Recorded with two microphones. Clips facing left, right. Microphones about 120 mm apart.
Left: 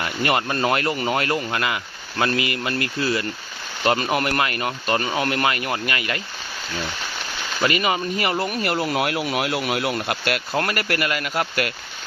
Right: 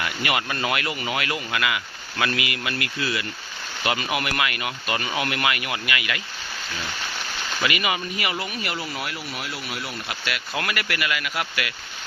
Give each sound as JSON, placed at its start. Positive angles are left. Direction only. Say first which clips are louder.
{"t": 0.0, "sound": "speech", "louder": "left 4 dB", "side_deg": 35}
{"t": 7.6, "sound": "speech", "louder": "left 5 dB", "side_deg": 35}
{"t": 8.8, "sound": "speech", "louder": "left 9 dB", "side_deg": 60}